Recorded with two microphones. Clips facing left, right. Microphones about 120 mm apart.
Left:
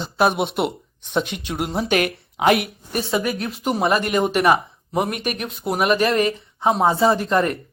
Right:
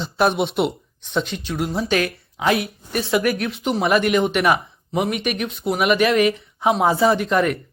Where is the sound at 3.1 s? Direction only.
25° left (ahead or behind).